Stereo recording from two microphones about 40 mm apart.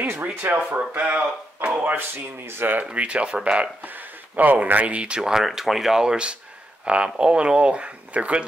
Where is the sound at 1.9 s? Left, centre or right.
Right.